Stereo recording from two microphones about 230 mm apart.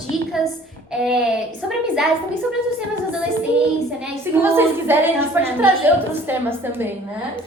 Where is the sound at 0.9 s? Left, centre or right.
Centre.